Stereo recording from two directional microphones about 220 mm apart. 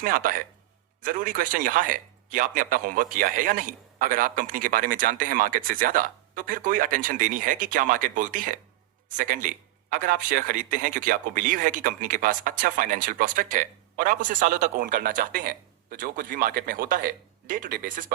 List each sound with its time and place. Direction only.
0.0 s speech: 40° right (ahead or behind)